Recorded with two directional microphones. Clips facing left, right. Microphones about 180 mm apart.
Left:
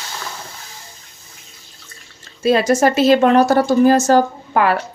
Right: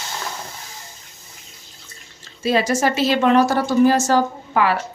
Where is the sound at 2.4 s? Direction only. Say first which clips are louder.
Left 5 dB; 50° left (ahead or behind).